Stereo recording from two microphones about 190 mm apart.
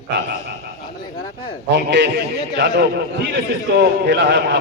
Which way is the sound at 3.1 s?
65° right (ahead or behind).